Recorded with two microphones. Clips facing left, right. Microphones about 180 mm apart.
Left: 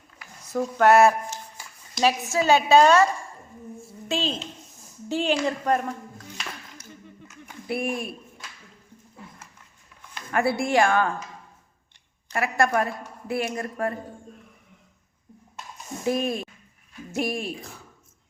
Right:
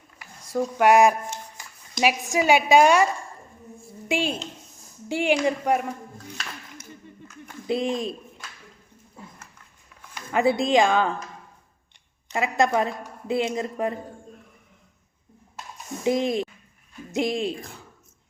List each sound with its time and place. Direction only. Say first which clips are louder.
0.4 s a woman's voice: even; 10° right (ahead or behind)
4.1 s a woman's voice: right 2 dB; 10° right (ahead or behind)
7.7 s speech: right 3 dB; 20° right (ahead or behind)
10.2 s a woman's voice: right 2 dB; 20° right (ahead or behind)
12.3 s speech: right 1 dB; 20° right (ahead or behind)
16.0 s a woman's voice: right 3 dB; 15° right (ahead or behind)